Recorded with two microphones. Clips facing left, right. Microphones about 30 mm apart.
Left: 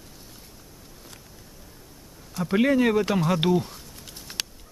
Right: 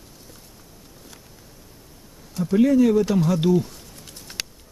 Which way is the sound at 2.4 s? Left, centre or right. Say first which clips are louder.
Right 4 dB; left.